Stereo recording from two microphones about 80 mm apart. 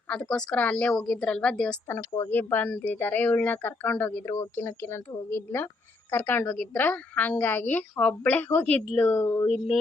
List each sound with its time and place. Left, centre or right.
0.1 s a woman's voice: centre
1.9 s speech: left
2.3 s a woman's voice: left